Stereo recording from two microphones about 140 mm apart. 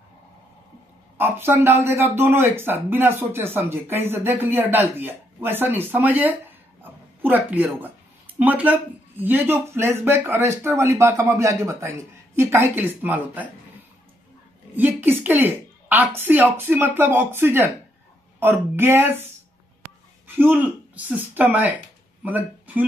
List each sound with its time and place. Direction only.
1.1 s speech: 15° right (ahead or behind)
6.8 s a sound: 15° right (ahead or behind)
8.4 s speech: 10° right (ahead or behind)
14.8 s a woman's voice: 15° right (ahead or behind)
20.2 s speech: 15° right (ahead or behind)